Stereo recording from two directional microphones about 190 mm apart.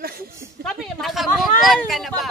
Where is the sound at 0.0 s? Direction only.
50° right (ahead or behind).